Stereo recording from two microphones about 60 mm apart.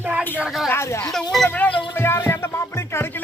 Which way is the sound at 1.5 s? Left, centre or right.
Left.